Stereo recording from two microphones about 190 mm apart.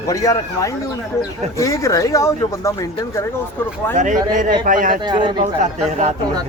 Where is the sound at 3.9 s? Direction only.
40° right (ahead or behind).